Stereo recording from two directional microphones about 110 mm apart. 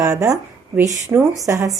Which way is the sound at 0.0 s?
30° right (ahead or behind).